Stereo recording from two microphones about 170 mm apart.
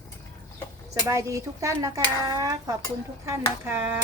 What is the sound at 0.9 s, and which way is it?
A child's voice, 20° right (ahead or behind).